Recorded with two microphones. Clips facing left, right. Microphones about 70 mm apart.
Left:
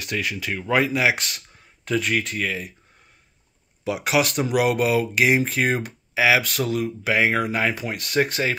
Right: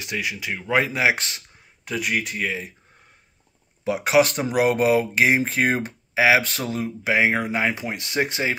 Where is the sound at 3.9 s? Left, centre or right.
Right.